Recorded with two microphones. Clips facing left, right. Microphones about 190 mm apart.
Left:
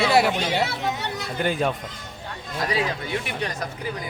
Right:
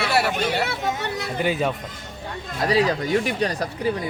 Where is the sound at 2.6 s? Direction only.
40° right (ahead or behind).